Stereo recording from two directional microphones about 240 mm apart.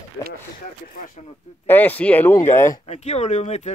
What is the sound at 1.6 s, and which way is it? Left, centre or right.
Speech, centre.